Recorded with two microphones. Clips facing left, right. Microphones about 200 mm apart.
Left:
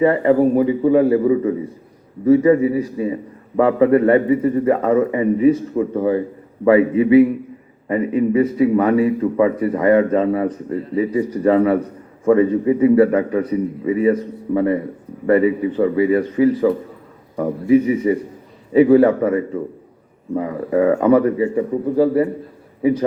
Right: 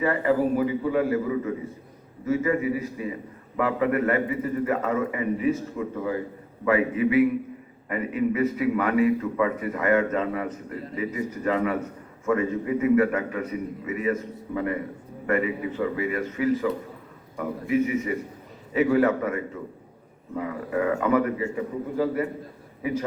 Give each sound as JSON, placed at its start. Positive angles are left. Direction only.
{"t": 0.0, "sound": "a man's voice", "side_deg": 30}